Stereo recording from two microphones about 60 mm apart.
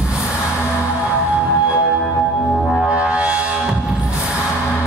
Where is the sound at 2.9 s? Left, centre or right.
Centre.